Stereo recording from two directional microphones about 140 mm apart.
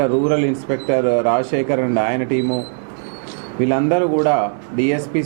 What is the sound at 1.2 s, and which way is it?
Speech, 20° right (ahead or behind).